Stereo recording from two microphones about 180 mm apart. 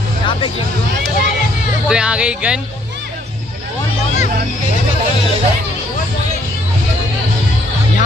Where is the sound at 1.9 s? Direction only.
5° right (ahead or behind).